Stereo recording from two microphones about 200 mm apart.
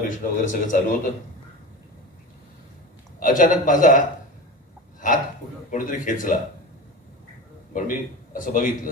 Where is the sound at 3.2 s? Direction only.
40° left (ahead or behind).